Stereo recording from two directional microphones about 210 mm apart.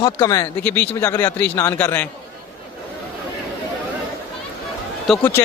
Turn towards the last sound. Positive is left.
turn(degrees=5)  # may be behind; listen again after turning